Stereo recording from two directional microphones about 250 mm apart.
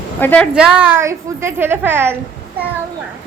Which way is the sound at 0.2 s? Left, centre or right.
Centre.